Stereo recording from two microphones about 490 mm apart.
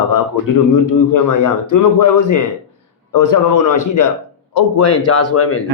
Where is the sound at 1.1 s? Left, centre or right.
Left.